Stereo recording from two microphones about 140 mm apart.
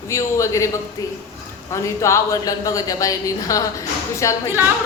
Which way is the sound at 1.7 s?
20° left (ahead or behind).